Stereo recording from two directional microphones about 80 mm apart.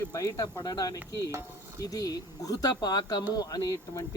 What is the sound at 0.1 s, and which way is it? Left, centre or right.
Speech, left.